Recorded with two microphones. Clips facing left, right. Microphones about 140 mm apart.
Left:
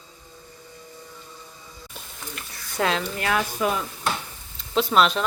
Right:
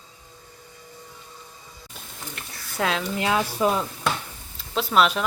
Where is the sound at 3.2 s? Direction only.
20° right (ahead or behind).